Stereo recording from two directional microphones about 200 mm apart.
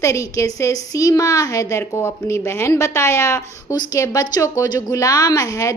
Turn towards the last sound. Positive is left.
turn(degrees=15)  # may be behind; listen again after turning